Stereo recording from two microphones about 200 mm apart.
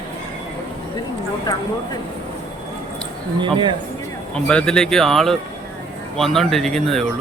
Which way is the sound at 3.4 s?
25° right (ahead or behind).